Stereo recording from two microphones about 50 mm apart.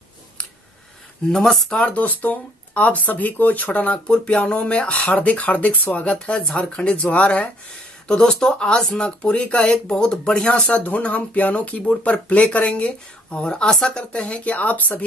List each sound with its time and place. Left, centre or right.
1.3 s speech: centre
1.8 s speech: left
8.1 s speech: centre
10.7 s speech: left